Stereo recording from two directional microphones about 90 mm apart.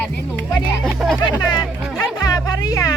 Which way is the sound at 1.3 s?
50° left (ahead or behind).